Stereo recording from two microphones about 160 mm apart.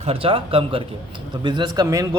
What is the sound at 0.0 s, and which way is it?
A man's voice, 35° right (ahead or behind).